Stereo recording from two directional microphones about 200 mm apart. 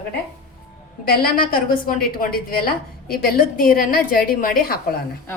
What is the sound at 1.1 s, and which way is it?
A woman's voice, 45° left (ahead or behind).